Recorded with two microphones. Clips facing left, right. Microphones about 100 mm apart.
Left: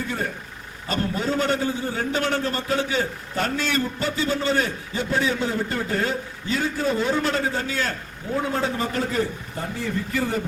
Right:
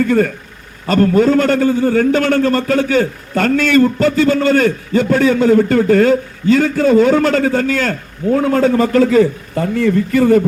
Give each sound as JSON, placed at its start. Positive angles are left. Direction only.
{"t": 0.0, "sound": "a man's voice", "side_deg": -70}